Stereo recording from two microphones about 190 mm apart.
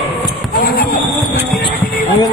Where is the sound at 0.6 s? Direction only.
50° left (ahead or behind).